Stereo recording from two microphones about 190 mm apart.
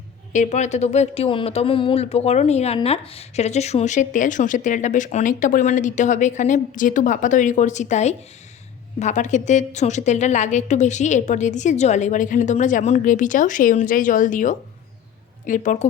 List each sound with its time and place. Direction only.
0.3 s a woman's voice: 35° left (ahead or behind)